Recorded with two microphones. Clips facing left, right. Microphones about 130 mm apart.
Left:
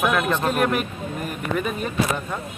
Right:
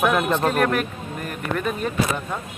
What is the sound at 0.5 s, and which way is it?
Speech, 10° left (ahead or behind).